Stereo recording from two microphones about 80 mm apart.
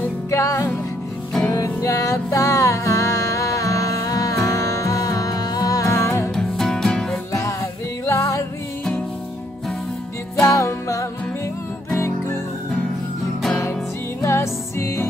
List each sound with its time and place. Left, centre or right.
0.3 s music: left
5.9 s music: left
6.3 s music: centre
8.0 s music: left
10.5 s music: left
14.2 s music: left